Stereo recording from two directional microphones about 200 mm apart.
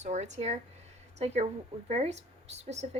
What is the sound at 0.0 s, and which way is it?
Speech, 35° right (ahead or behind).